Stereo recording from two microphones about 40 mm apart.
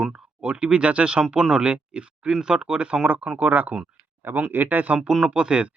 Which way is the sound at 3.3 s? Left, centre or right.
Right.